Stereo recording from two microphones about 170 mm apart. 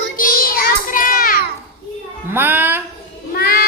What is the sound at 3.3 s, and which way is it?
Child singing, 65° left (ahead or behind).